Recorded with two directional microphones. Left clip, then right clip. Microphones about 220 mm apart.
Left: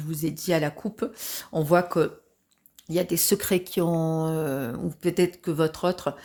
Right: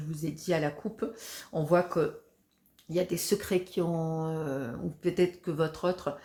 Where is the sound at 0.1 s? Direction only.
50° left (ahead or behind).